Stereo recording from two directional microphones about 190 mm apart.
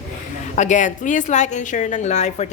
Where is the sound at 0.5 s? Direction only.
40° left (ahead or behind).